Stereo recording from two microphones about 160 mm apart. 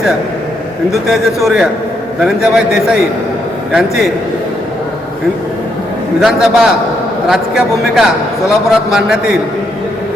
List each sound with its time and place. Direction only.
1.0 s a man's voice: centre (ahead or behind)
6.2 s a man's voice: 5° right (ahead or behind)